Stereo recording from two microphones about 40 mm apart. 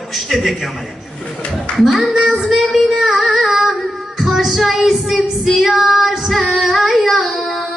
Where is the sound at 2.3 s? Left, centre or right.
Centre.